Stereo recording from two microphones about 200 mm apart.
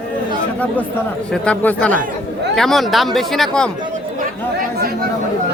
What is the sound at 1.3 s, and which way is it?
A man's voice, 5° left (ahead or behind).